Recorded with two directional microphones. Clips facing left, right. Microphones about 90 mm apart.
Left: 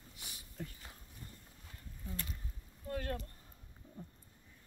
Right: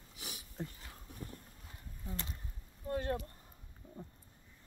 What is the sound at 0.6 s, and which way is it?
Dog, 25° right (ahead or behind).